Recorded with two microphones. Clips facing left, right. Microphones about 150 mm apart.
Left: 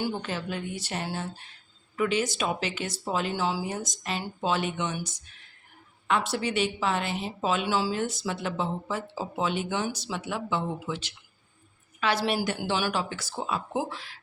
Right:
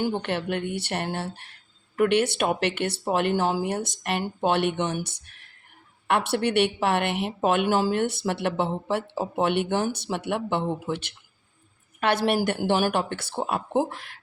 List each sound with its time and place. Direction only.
0.0 s a woman's voice: 65° right (ahead or behind)